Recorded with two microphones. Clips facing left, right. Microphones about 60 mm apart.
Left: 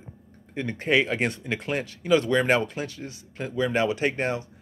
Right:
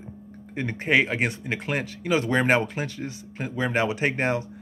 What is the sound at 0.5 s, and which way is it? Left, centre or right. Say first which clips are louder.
Speech: right 1 dB; right.